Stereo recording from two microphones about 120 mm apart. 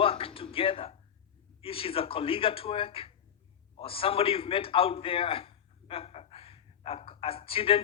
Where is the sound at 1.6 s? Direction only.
50° left (ahead or behind).